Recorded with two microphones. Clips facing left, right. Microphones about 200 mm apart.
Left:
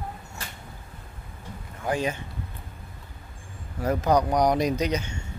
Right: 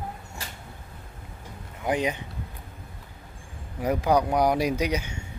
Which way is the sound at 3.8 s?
10° right (ahead or behind).